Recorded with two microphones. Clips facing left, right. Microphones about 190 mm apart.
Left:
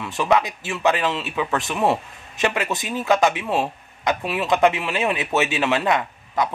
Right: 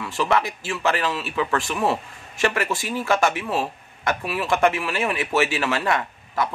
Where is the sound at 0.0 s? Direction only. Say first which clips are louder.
Left 2 dB; 20° left (ahead or behind).